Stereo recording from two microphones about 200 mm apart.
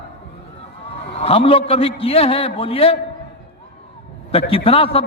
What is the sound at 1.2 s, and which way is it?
A man's voice, 30° left (ahead or behind).